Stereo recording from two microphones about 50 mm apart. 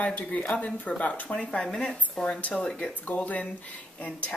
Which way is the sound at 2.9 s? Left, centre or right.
Left.